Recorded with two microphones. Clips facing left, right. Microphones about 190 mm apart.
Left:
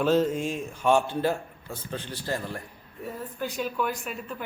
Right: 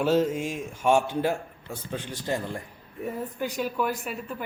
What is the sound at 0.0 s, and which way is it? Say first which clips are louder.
Speech: even; 10° right (ahead or behind).